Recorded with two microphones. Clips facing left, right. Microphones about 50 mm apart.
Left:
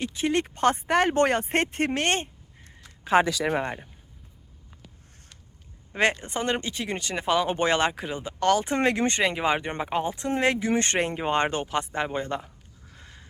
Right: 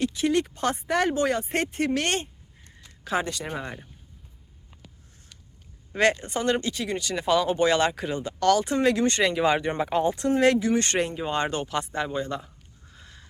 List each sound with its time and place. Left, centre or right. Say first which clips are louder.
0.0 s speech: right 2 dB; left
1.9 s speech: even; left
3.2 s speech: left 7 dB; left
6.0 s speech: right 2 dB; left
8.0 s speech: right 3 dB; centre
8.4 s speech: right 1 dB; left
13.0 s a sound: even; left